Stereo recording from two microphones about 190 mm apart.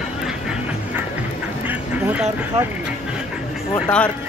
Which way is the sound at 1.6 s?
5° right (ahead or behind).